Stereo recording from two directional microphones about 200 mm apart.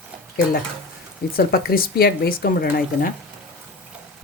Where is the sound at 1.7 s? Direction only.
50° left (ahead or behind).